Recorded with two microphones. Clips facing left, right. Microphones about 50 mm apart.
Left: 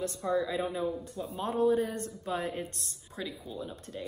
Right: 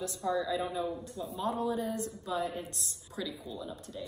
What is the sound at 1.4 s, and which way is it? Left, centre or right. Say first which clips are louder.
A woman's voice: left 5 dB; left.